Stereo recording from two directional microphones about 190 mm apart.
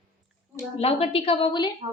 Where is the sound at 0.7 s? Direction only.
30° left (ahead or behind).